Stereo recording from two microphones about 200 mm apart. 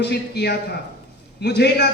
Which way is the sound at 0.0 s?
55° left (ahead or behind).